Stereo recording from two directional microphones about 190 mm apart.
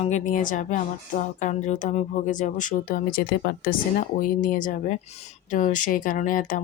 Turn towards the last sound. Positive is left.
turn(degrees=45)  # may be behind; listen again after turning